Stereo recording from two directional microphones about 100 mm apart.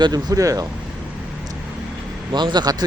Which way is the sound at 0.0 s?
40° right (ahead or behind).